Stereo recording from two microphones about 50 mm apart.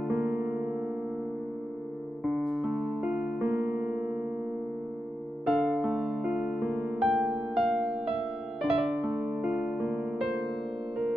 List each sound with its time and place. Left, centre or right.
0.1 s electric piano: centre
2.2 s music: centre
3.8 s music: right
5.4 s music: centre